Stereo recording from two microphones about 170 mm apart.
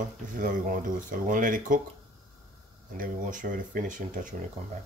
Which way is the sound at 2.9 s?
50° right (ahead or behind).